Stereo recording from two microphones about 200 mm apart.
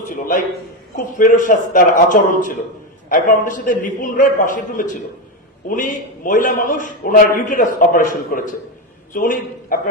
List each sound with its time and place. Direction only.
0.1 s a man's voice: 40° left (ahead or behind)